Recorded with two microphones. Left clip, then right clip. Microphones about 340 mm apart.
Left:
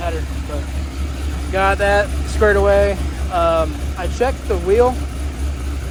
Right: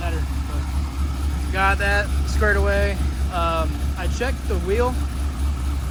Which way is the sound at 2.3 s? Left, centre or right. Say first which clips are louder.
Left 7 dB; left.